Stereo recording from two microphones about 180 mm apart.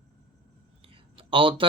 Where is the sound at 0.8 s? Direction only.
30° right (ahead or behind).